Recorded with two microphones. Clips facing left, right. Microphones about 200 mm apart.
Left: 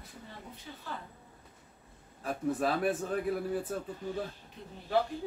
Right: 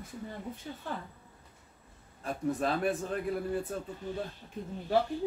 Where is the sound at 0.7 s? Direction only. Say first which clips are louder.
Right 5 dB; 40° right (ahead or behind).